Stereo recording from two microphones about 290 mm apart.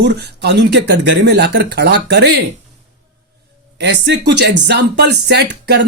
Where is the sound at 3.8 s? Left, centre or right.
Right.